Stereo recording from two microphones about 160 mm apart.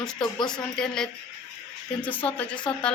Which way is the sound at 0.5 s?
5° left (ahead or behind).